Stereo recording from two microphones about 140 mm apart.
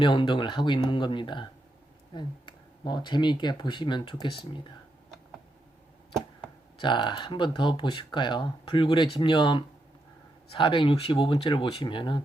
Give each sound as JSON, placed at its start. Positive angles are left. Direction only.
{"t": 0.0, "sound": "speech", "side_deg": 35}
{"t": 6.7, "sound": "speech", "side_deg": 35}